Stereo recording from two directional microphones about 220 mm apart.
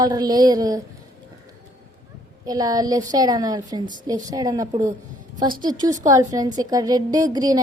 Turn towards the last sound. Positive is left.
turn(degrees=-15)  # may be behind; listen again after turning